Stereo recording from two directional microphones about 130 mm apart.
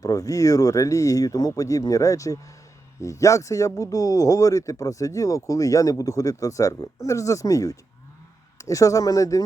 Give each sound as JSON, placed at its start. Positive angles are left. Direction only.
{"t": 0.0, "sound": "a man's voice", "side_deg": 25}